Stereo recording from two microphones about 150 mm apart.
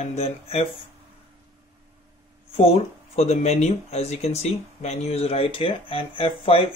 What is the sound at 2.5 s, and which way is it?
Speech, 45° left (ahead or behind).